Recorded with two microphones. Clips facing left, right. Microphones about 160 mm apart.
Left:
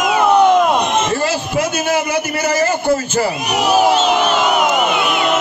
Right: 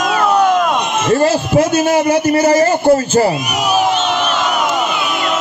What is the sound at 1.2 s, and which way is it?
A man's voice, 35° right (ahead or behind).